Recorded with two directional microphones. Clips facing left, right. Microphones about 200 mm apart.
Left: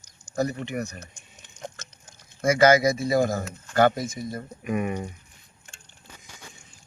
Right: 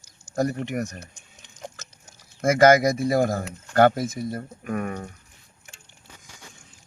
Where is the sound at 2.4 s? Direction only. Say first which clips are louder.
Right 2 dB; 50° right (ahead or behind).